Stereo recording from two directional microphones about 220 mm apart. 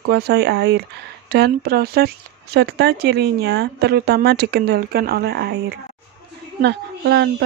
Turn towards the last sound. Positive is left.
turn(degrees=-50)  # may be behind; listen again after turning